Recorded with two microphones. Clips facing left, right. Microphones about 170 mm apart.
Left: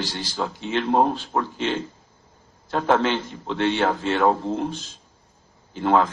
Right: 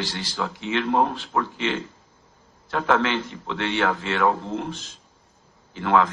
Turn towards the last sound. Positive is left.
turn(degrees=40)  # may be behind; listen again after turning